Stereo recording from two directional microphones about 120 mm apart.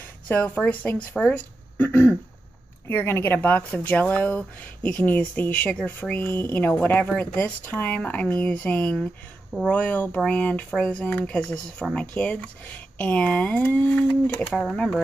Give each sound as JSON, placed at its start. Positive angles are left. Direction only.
{"t": 0.3, "sound": "speech", "side_deg": 15}
{"t": 14.4, "sound": "speech", "side_deg": 0}